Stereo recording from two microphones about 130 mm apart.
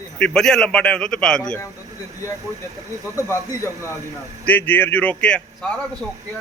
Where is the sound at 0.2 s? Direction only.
5° left (ahead or behind).